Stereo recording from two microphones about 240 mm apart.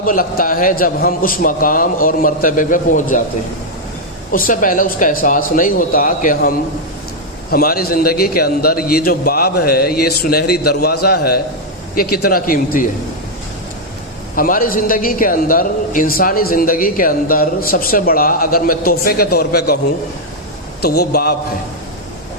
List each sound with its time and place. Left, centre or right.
0.0 s a man's voice: left
4.3 s a man's voice: left
7.5 s a man's voice: left
14.3 s a man's voice: left
20.8 s a man's voice: left